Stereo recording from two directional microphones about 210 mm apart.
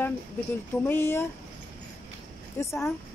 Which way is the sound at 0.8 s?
10° left (ahead or behind).